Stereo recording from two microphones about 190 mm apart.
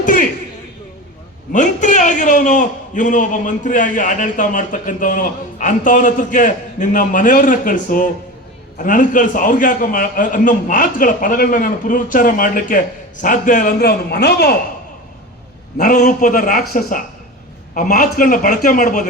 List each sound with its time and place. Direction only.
0.0 s a sound: 45° left (ahead or behind)
1.5 s a man's voice: 40° left (ahead or behind)
13.7 s speech: 60° left (ahead or behind)
15.8 s a man's voice: 40° left (ahead or behind)